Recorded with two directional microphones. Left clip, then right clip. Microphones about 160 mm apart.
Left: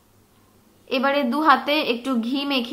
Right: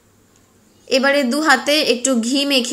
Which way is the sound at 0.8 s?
20° right (ahead or behind).